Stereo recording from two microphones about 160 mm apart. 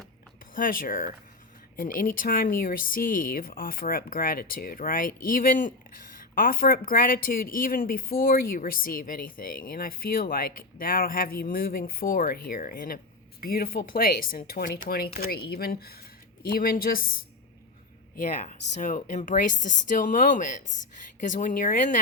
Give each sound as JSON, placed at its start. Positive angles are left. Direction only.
{"t": 0.5, "sound": "speech", "side_deg": 60}
{"t": 18.2, "sound": "speech", "side_deg": 55}